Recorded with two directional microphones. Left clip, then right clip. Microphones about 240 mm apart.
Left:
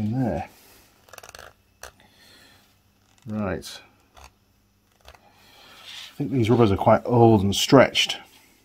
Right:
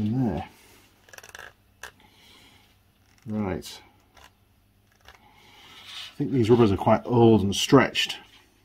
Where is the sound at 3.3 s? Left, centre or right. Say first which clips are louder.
Left 2 dB; left.